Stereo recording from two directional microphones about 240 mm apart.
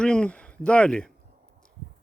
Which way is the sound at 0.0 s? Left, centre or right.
Centre.